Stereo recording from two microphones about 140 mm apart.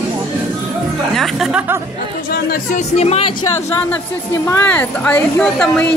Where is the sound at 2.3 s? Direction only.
90° left.